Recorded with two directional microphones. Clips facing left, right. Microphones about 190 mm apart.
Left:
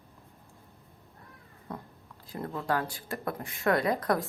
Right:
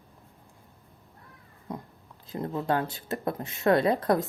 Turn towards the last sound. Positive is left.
turn(degrees=-25)  # may be behind; listen again after turning